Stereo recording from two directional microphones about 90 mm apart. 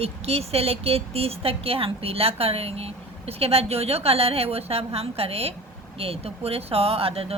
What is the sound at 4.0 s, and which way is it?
Speech, 90° right.